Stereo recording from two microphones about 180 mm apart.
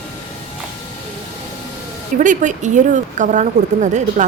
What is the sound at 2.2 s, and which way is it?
Speech, 45° right (ahead or behind).